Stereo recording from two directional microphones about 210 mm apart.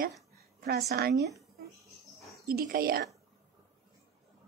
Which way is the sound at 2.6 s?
45° right (ahead or behind).